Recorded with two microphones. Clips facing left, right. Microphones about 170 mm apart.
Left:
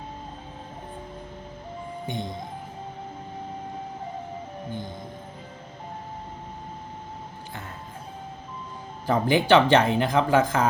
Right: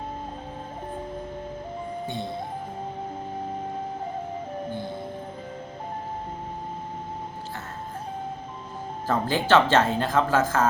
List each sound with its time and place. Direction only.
2.0 s speech: 15° left (ahead or behind)
9.0 s speech: 15° left (ahead or behind)